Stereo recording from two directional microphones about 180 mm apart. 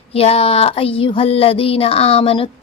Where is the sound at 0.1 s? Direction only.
35° left (ahead or behind).